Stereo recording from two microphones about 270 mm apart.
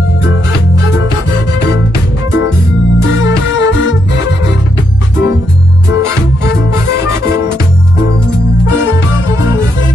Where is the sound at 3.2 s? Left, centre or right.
Left.